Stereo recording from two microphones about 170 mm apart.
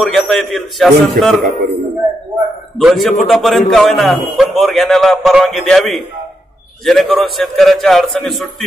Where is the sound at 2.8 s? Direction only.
Centre (ahead or behind).